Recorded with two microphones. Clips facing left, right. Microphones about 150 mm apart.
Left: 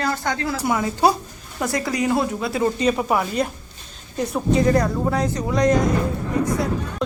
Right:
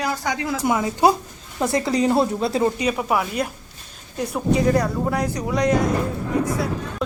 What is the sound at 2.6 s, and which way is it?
Speech, 10° right (ahead or behind).